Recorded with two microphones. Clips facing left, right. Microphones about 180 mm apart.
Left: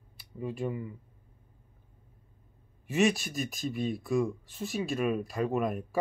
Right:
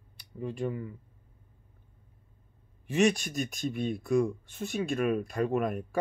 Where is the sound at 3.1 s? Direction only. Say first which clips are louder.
Right 1 dB; 5° left (ahead or behind).